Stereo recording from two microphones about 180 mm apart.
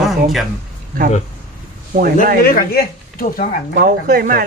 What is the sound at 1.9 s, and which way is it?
Speech, 55° right (ahead or behind).